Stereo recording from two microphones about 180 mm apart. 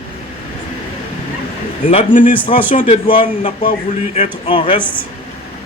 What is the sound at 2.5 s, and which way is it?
A man's voice, 35° left (ahead or behind).